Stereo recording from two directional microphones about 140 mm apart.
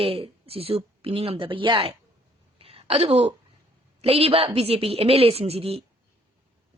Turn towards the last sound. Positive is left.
turn(degrees=-45)  # may be behind; listen again after turning